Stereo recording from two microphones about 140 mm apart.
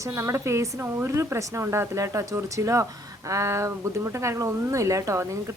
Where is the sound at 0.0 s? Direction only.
20° right (ahead or behind).